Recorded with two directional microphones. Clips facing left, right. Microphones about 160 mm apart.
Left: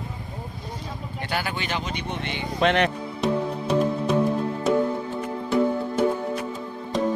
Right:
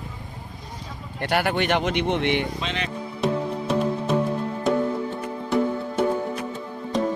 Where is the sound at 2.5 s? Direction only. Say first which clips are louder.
Left 9 dB; 60° left (ahead or behind).